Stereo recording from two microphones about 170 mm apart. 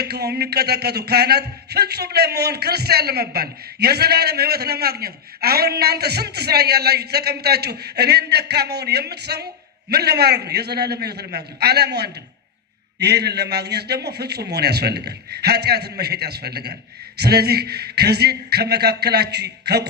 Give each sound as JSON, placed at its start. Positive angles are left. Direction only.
{"t": 0.0, "sound": "speech", "side_deg": -70}